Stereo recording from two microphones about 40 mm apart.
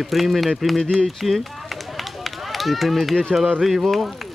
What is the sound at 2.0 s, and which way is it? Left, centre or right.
Run, centre.